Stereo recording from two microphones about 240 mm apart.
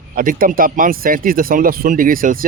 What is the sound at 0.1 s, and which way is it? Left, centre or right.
Speech, right.